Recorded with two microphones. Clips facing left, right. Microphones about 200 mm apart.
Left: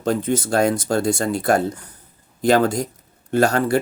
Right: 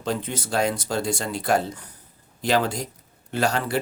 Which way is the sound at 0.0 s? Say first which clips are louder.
Left 7 dB; 50° left (ahead or behind).